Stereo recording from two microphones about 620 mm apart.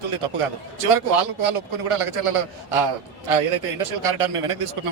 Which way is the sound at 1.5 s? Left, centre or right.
Right.